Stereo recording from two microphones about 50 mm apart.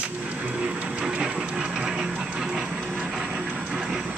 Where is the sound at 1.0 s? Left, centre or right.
Centre.